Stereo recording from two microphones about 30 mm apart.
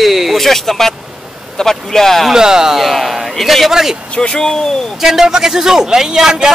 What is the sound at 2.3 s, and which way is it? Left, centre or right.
Speech, right.